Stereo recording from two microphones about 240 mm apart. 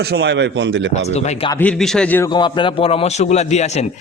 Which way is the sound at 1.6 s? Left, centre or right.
Centre.